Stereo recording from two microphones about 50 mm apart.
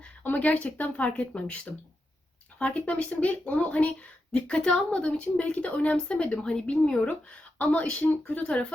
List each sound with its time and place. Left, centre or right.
0.2 s a woman's voice: left; by 7.0 s centre
7.0 s speech: left